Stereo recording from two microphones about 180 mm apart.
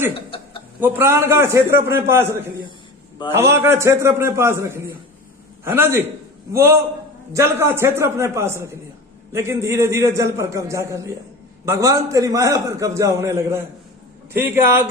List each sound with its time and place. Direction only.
0.1 s chuckle: 30° left (ahead or behind)
0.8 s a man's voice: 10° right (ahead or behind)
3.5 s a man's voice: 15° right (ahead or behind)